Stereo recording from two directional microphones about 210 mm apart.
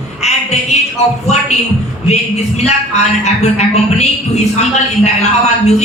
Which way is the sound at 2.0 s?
30° left (ahead or behind).